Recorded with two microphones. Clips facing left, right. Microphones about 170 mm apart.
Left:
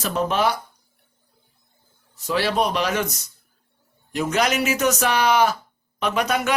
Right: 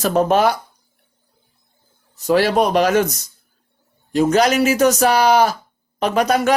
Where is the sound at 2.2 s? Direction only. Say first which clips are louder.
Right 6 dB; 45° right (ahead or behind).